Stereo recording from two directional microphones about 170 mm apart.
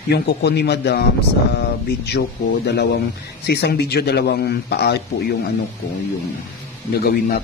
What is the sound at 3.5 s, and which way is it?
A man's voice, 70° left (ahead or behind).